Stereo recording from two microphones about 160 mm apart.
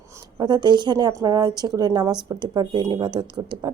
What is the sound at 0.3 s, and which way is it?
A woman's voice, 25° right (ahead or behind).